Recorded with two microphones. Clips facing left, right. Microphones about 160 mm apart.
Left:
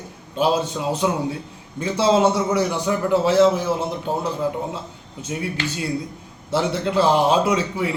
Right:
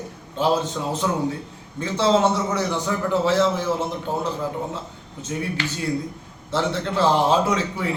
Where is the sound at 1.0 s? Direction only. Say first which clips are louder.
Left 1 dB; 15° left (ahead or behind).